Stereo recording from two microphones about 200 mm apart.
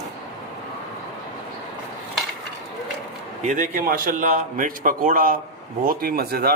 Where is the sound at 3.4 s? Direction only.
40° right (ahead or behind).